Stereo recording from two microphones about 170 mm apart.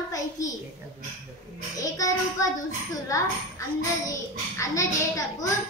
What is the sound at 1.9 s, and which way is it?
A woman's voice, 20° left (ahead or behind).